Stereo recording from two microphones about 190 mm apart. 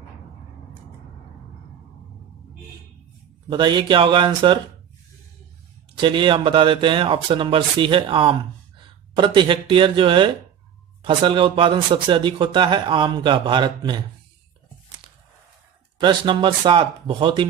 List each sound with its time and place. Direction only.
3.4 s speech: 25° right (ahead or behind)
5.9 s speech: 25° right (ahead or behind)
16.0 s speech: 25° right (ahead or behind)